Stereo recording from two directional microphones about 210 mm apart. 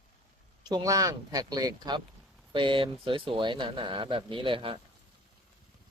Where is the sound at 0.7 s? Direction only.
15° right (ahead or behind).